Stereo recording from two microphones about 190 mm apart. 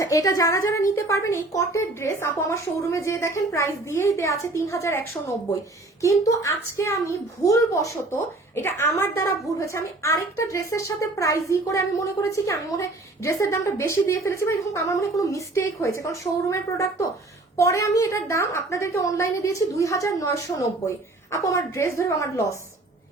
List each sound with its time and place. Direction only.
0.0 s a woman's voice: 20° left (ahead or behind)
6.0 s a woman's voice: 15° left (ahead or behind)